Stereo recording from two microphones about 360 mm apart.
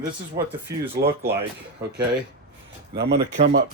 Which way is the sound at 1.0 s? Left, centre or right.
Right.